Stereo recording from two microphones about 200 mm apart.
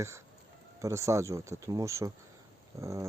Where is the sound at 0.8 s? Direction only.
15° right (ahead or behind).